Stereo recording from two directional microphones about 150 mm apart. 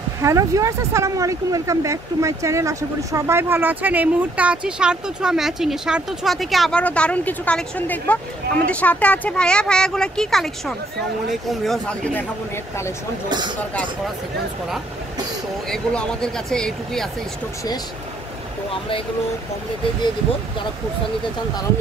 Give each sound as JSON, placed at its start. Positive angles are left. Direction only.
{"t": 0.2, "sound": "speech", "side_deg": -20}
{"t": 15.7, "sound": "speech", "side_deg": 5}
{"t": 18.7, "sound": "speech", "side_deg": 35}